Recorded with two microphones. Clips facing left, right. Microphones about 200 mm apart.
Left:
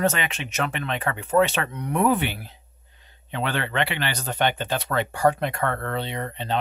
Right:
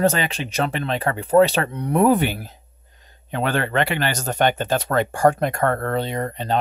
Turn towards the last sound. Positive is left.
turn(degrees=-45)  # may be behind; listen again after turning